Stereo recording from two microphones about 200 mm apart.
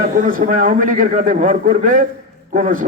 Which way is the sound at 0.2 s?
40° right (ahead or behind).